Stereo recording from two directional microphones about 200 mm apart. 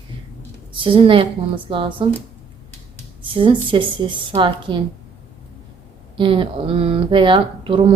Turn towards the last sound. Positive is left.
turn(degrees=-25)  # may be behind; listen again after turning